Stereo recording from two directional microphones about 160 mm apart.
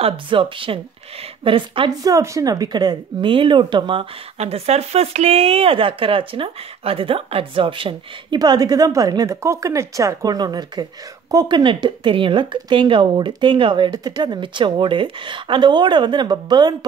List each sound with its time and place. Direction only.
0.0 s speech: 35° right (ahead or behind)
2.1 s speech: 20° right (ahead or behind)